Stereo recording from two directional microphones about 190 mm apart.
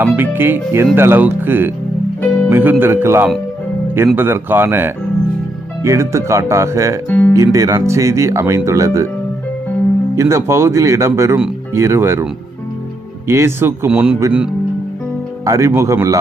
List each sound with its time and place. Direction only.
0.0 s speech: 10° right (ahead or behind)
7.1 s speech: 10° left (ahead or behind)
7.3 s speech: 15° right (ahead or behind)
10.2 s speech: 15° right (ahead or behind)
15.4 s speech: 15° right (ahead or behind)